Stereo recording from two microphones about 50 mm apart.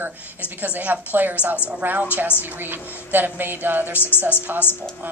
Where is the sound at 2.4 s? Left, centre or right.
Right.